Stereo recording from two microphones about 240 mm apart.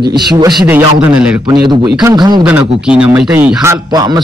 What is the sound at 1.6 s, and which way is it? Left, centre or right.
Speech, centre.